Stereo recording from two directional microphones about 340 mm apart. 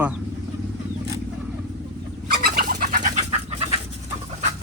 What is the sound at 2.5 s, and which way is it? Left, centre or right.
Bird, right.